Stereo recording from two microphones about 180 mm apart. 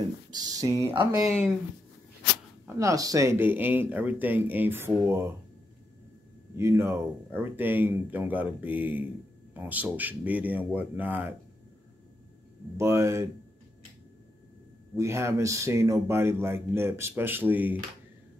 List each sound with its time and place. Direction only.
0.3 s speech: 20° right (ahead or behind)
2.6 s speech: 20° right (ahead or behind)
6.5 s speech: 15° right (ahead or behind)
12.7 s speech: 15° right (ahead or behind)
15.0 s speech: 15° right (ahead or behind)